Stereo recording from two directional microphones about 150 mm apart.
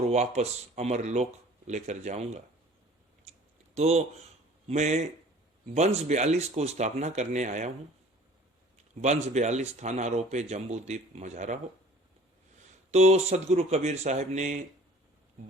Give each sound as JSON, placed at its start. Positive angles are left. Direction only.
{"t": 0.1, "sound": "speech", "side_deg": -50}
{"t": 3.8, "sound": "speech", "side_deg": -45}
{"t": 9.0, "sound": "speech", "side_deg": -50}
{"t": 12.9, "sound": "speech", "side_deg": -45}